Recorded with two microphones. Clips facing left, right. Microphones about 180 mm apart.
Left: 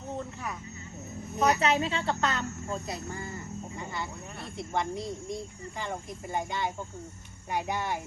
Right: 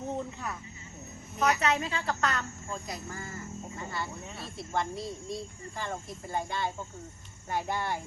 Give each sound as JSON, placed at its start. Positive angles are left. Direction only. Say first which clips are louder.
{"t": 1.4, "sound": "speech", "louder": "left 2 dB", "side_deg": 35}
{"t": 2.6, "sound": "speech", "louder": "left 4 dB", "side_deg": 40}
{"t": 2.9, "sound": "speech", "louder": "left 3 dB", "side_deg": 20}